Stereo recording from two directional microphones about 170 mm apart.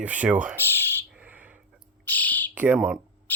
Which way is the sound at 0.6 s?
15° left (ahead or behind).